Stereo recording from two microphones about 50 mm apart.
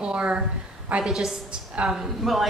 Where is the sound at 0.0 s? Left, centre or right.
Centre.